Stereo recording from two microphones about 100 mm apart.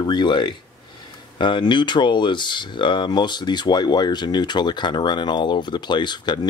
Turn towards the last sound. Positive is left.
turn(degrees=50)  # may be behind; listen again after turning